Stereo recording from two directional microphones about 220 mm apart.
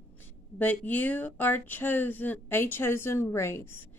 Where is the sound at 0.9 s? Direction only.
10° left (ahead or behind).